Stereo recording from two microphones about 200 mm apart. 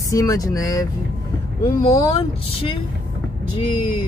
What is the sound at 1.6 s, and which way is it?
Speech, 30° left (ahead or behind).